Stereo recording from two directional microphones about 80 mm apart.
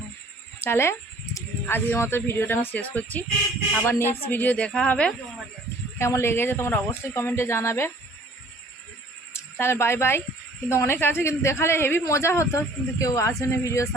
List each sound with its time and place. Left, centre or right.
0.6 s a sound: left
1.6 s speech: left
6.0 s speech: left
9.3 s speech: left